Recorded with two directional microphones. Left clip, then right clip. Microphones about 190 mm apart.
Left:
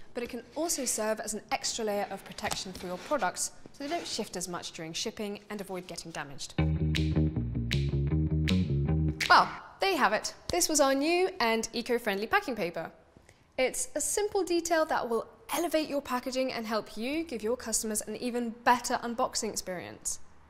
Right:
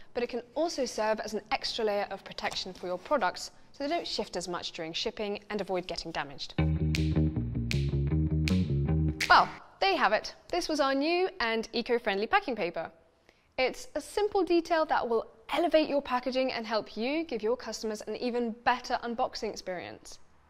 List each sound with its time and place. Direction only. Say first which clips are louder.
0.1 s a woman's voice: right 4 dB; 45° right (ahead or behind)
6.5 s music: left 1 dB; centre (ahead or behind)
9.3 s a sound: even; 35° right (ahead or behind)
10.5 s a woman's voice: left 2 dB; 35° right (ahead or behind)